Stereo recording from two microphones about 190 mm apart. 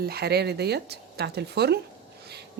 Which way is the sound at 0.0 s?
55° right (ahead or behind).